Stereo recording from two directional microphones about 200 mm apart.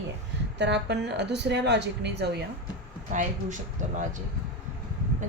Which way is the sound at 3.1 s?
35° right (ahead or behind).